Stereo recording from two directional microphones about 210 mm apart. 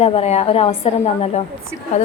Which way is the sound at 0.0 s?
30° left (ahead or behind).